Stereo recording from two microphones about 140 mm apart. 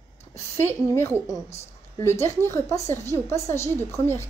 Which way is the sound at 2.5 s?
20° left (ahead or behind).